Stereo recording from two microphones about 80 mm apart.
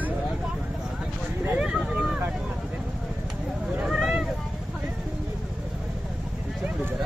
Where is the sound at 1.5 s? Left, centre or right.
Centre.